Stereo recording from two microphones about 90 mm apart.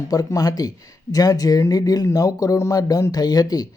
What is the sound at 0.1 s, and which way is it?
Speech, 40° left (ahead or behind).